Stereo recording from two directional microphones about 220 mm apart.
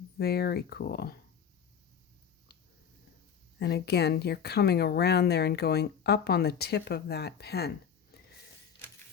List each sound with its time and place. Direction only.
0.2 s a woman's voice: 45° left (ahead or behind)
3.6 s a woman's voice: 50° left (ahead or behind)
8.1 s a sound: 45° left (ahead or behind)